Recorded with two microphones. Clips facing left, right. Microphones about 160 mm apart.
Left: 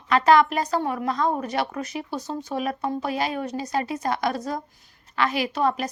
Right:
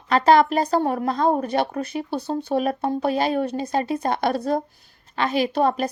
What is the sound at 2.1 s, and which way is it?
Speech, 60° right (ahead or behind).